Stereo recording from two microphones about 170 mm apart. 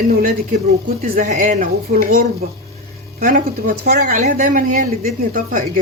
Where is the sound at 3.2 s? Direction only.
50° right (ahead or behind).